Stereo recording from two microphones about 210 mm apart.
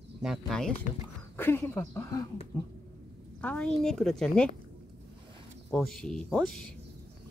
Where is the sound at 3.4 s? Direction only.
5° left (ahead or behind).